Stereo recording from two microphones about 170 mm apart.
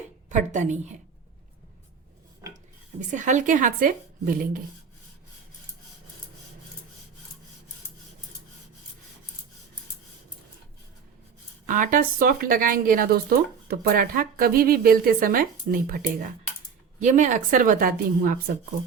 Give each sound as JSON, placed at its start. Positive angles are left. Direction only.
{"t": 0.3, "sound": "a woman's voice", "side_deg": -45}
{"t": 3.1, "sound": "a woman's voice", "side_deg": -45}
{"t": 11.6, "sound": "a woman's voice", "side_deg": -50}